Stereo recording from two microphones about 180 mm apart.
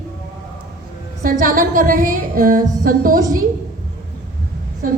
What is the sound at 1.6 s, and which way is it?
A woman's voice, 50° right (ahead or behind).